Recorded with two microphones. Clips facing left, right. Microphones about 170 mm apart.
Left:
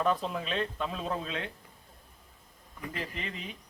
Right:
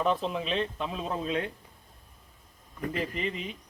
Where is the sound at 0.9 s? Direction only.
10° right (ahead or behind).